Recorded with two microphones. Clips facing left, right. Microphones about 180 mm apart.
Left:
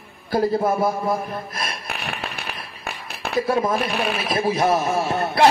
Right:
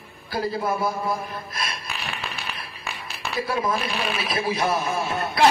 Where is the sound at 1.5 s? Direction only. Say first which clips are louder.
Left 2 dB; 60° left (ahead or behind).